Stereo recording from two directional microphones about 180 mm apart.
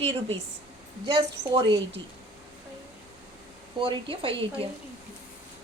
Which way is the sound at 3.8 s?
30° right (ahead or behind).